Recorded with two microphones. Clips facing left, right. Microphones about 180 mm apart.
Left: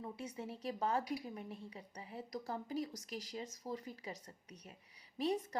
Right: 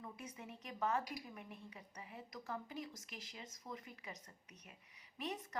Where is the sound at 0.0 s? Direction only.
30° left (ahead or behind).